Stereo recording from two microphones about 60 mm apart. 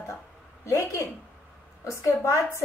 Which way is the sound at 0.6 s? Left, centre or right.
Left.